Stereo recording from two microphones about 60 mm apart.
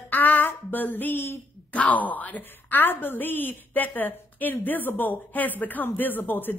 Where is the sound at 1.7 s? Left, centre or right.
Left.